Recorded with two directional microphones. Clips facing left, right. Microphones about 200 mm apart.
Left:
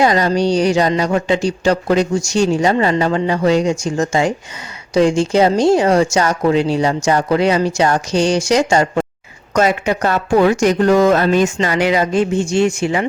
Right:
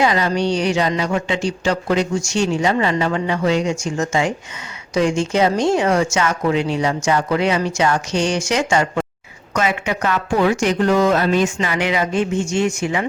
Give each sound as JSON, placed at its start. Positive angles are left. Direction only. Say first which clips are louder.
{"t": 0.0, "sound": "speech", "louder": "left 4 dB", "side_deg": 40}